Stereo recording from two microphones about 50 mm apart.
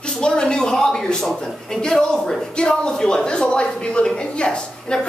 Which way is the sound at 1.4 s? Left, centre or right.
Centre.